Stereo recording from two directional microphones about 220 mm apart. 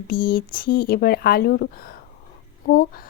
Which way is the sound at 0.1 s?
40° left (ahead or behind).